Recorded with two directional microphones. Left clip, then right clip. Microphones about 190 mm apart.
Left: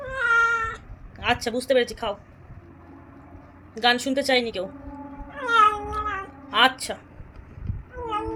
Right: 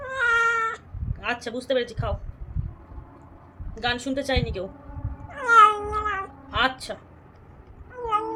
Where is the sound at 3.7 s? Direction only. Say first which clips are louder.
Left 5 dB; 20° left (ahead or behind).